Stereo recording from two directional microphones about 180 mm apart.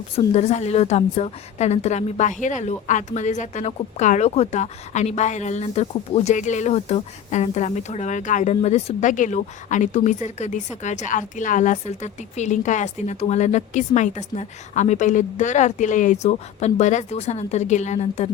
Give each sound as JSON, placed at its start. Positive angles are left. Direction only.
{"t": 0.3, "sound": "a woman's voice", "side_deg": 40}